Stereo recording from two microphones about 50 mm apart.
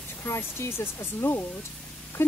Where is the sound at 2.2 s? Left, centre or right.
Left.